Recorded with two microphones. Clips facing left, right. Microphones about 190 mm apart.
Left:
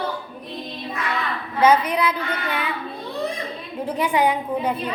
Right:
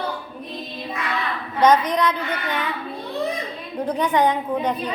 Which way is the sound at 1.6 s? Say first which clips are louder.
Right 1 dB; 10° left (ahead or behind).